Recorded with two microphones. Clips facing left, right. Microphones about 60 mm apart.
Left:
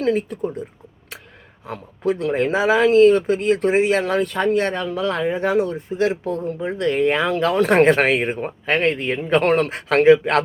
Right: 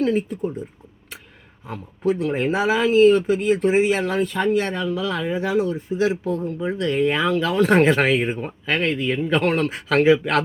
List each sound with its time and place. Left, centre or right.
0.0 s speech: left
1.6 s speech: left